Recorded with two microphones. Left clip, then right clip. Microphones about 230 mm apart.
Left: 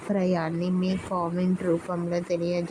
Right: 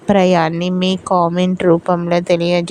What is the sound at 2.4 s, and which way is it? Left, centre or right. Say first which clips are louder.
Speech: right 12 dB; right.